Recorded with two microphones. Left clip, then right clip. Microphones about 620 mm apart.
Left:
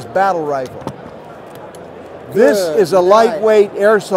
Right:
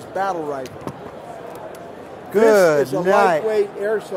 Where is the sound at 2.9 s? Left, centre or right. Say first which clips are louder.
Left 6 dB; left.